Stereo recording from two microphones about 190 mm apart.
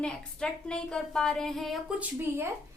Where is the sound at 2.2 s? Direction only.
15° right (ahead or behind).